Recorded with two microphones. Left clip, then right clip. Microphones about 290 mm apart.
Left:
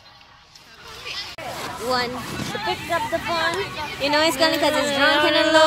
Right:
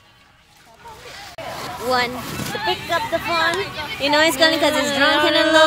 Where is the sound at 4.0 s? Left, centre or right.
Centre.